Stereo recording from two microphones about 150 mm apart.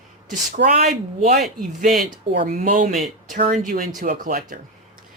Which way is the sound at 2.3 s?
60° right (ahead or behind).